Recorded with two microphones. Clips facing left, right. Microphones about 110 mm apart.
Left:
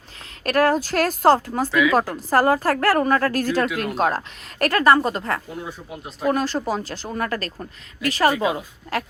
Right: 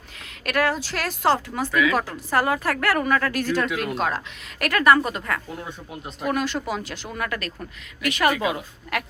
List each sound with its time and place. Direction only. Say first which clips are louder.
0.4 s a woman's voice: left 5 dB; 40° left (ahead or behind)
5.6 s speech: left 1 dB; 5° left (ahead or behind)
6.2 s speech: left 4 dB; 35° left (ahead or behind)